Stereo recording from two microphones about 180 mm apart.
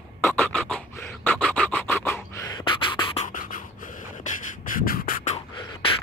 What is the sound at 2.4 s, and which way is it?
Beatboxing, 25° left (ahead or behind).